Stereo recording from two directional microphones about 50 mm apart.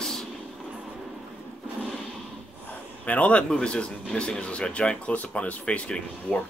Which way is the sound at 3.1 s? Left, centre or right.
Left.